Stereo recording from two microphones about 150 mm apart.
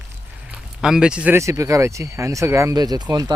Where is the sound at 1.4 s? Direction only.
20° right (ahead or behind).